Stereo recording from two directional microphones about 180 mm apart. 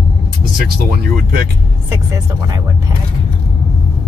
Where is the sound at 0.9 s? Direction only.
55° right (ahead or behind).